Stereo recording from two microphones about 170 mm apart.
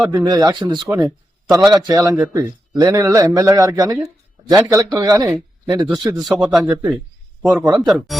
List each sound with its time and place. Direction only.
0.1 s speech: 25° right (ahead or behind)
2.1 s speech: 10° right (ahead or behind)
5.8 s a man's voice: 5° right (ahead or behind)
7.4 s speech: 25° right (ahead or behind)
7.9 s a man's voice: centre (ahead or behind)